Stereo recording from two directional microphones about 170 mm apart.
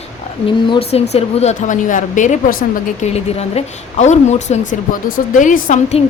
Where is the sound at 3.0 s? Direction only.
40° left (ahead or behind).